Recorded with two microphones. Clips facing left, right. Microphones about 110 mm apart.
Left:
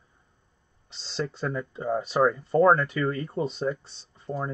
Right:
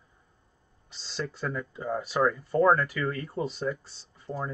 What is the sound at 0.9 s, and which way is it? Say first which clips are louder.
Speech: left 3 dB; 30° left (ahead or behind).